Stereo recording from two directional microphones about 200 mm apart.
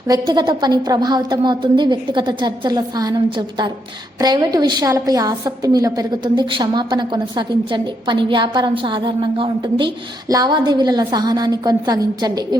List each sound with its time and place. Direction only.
0.1 s a woman's voice: 20° right (ahead or behind)